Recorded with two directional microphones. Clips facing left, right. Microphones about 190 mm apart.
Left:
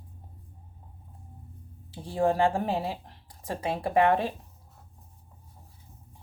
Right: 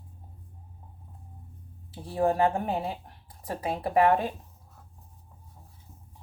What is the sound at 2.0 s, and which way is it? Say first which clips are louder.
Speech: even; 30° left (ahead or behind).